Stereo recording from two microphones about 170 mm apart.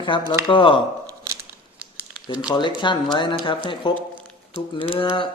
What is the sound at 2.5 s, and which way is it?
A man's voice, 25° left (ahead or behind).